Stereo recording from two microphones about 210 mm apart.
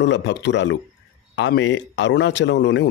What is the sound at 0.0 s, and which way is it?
Speech, 60° left (ahead or behind).